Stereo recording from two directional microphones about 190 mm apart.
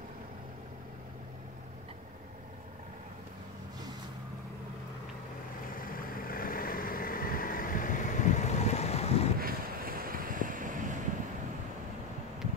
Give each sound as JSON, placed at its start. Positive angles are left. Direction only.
{"t": 5.8, "sound": "vehicle", "side_deg": 50}
{"t": 9.4, "sound": "boat", "side_deg": -50}